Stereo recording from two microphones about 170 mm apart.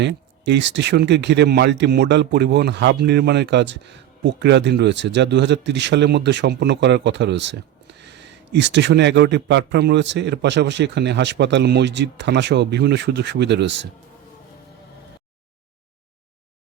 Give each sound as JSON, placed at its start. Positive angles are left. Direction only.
{"t": 0.0, "sound": "speech", "side_deg": -90}